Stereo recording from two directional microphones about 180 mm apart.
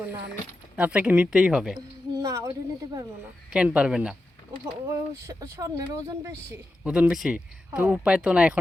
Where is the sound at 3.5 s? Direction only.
5° right (ahead or behind).